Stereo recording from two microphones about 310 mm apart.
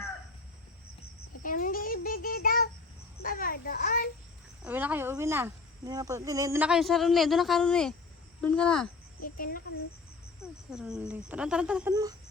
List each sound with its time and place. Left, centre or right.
1.4 s child singing: left
3.2 s a child's voice: left
4.6 s speech: centre
9.2 s a child's voice: left
10.4 s speech: centre